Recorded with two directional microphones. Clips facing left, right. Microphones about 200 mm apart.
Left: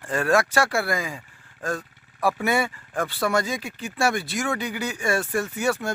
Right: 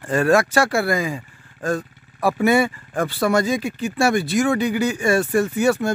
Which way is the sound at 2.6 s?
25° right (ahead or behind).